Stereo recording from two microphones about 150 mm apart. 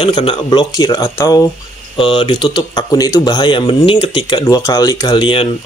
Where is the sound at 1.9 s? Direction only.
35° left (ahead or behind).